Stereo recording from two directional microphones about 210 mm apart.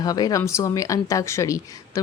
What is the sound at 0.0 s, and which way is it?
Speech, 20° left (ahead or behind).